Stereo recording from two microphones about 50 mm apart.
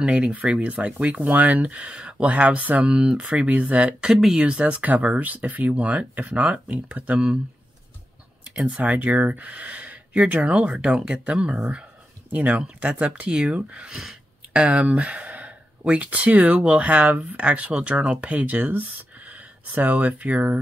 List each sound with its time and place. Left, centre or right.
0.0 s speech: right
2.9 s speech: right
4.1 s speech: centre
4.5 s speech: right
8.5 s speech: right
11.3 s speech: centre
12.3 s speech: right